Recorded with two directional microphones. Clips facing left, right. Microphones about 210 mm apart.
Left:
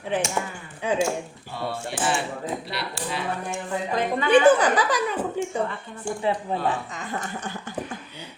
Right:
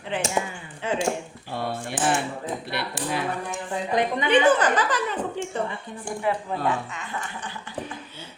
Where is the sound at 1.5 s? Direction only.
50° right (ahead or behind).